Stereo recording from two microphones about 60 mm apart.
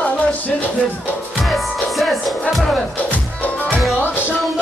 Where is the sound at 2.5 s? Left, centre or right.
Centre.